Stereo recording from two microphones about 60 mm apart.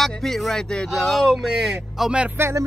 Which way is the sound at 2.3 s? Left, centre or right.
Right.